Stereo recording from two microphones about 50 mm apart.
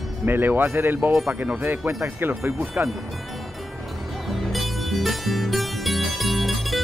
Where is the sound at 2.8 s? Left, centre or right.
Right.